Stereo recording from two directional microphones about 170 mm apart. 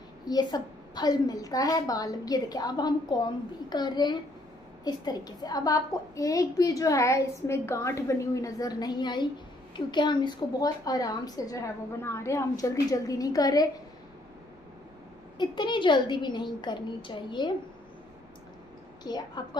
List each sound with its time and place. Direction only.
0.2 s a woman's voice: 25° left (ahead or behind)
15.3 s a woman's voice: 25° left (ahead or behind)
19.0 s a woman's voice: 25° left (ahead or behind)